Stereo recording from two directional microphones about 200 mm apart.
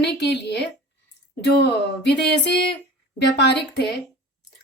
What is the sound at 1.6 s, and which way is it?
A woman's voice, 60° left (ahead or behind).